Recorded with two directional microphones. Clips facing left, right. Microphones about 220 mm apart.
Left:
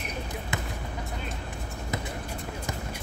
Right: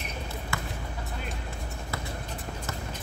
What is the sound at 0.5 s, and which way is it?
Basketball bounce, 20° left (ahead or behind).